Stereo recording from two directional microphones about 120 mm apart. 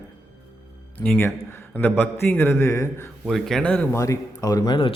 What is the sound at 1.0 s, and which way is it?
A man's voice, 15° left (ahead or behind).